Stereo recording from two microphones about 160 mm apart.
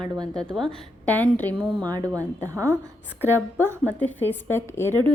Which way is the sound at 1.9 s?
25° right (ahead or behind).